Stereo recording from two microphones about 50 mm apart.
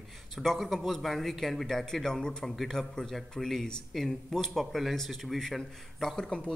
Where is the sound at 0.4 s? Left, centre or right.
Centre.